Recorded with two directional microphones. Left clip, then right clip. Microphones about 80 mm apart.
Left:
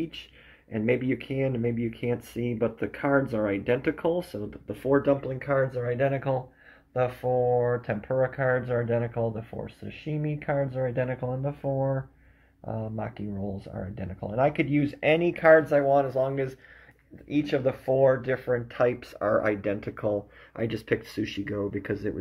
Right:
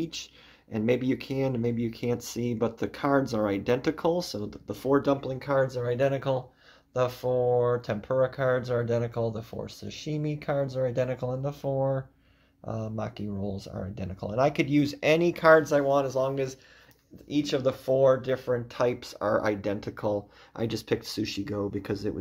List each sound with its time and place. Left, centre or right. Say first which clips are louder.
0.1 s speech: right 3 dB; right
16.2 s speech: left 1 dB; right
17.5 s speech: even; centre
18.8 s speech: left 2 dB; right
19.5 s speech: left 2 dB; right